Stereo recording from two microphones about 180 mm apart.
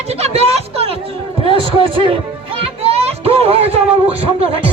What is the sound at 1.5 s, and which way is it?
Speech, 30° right (ahead or behind).